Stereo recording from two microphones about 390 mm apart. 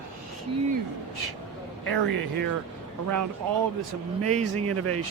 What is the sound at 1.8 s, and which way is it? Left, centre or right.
Speech, right.